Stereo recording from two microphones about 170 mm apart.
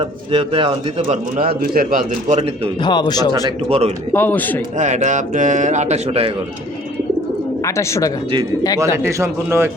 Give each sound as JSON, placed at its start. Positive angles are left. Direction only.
{"t": 0.0, "sound": "speech", "side_deg": -30}
{"t": 1.4, "sound": "speech", "side_deg": -60}
{"t": 2.8, "sound": "speech", "side_deg": 25}
{"t": 3.7, "sound": "speech", "side_deg": -40}
{"t": 4.1, "sound": "a man's voice", "side_deg": 10}
{"t": 4.8, "sound": "a man's voice", "side_deg": -45}
{"t": 7.6, "sound": "a man's voice", "side_deg": 15}
{"t": 9.0, "sound": "speech", "side_deg": -15}